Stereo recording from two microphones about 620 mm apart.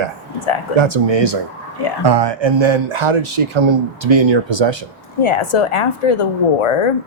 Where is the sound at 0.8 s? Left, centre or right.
Right.